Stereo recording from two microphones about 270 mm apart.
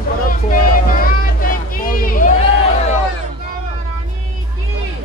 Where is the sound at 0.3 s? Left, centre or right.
Left.